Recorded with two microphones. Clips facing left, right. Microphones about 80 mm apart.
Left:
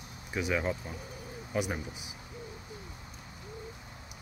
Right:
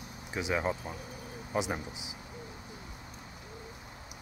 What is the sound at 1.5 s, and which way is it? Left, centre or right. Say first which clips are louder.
Speech: right 1 dB; right.